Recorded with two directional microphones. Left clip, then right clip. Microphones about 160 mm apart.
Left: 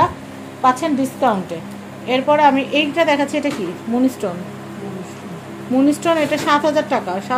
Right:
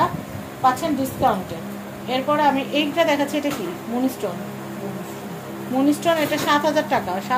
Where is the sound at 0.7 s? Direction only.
50° left (ahead or behind).